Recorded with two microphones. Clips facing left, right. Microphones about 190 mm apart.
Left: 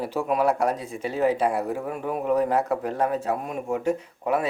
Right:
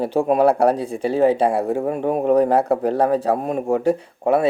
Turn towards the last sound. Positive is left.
turn(degrees=-35)  # may be behind; listen again after turning